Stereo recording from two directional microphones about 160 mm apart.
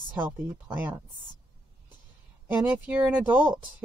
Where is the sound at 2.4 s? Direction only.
10° right (ahead or behind).